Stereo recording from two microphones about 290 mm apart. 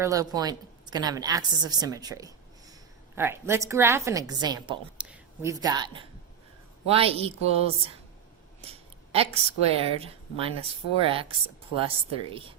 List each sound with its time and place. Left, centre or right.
0.0 s a woman's voice: centre
4.9 s a woman's voice: centre